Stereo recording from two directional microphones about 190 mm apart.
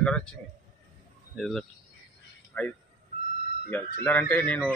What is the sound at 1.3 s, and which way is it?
A man's voice, centre (ahead or behind).